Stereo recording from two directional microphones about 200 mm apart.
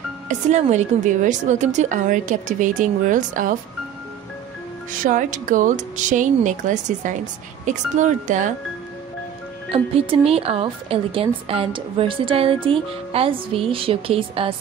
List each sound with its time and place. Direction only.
0.3 s a woman's voice: 35° right (ahead or behind)
5.0 s a woman's voice: 40° right (ahead or behind)
9.7 s speech: 30° right (ahead or behind)